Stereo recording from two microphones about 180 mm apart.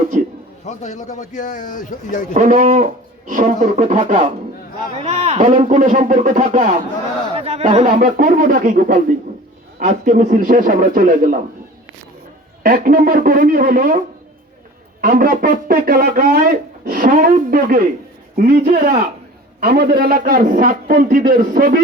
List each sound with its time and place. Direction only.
0.6 s a man's voice: 40° left (ahead or behind)
2.3 s speech: 45° right (ahead or behind)
5.0 s speech: 35° right (ahead or behind)
7.3 s speech: 35° right (ahead or behind)
12.6 s speech: 50° right (ahead or behind)
15.0 s speech: 50° right (ahead or behind)